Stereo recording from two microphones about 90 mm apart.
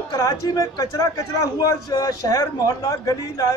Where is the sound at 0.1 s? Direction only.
45° left (ahead or behind).